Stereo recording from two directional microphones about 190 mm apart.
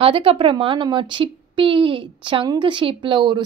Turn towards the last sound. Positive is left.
turn(degrees=-25)  # may be behind; listen again after turning